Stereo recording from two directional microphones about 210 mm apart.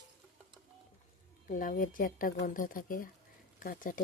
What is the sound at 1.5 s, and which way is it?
Speech, 40° left (ahead or behind).